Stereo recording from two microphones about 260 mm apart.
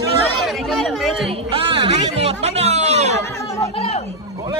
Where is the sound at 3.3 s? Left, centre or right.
Centre.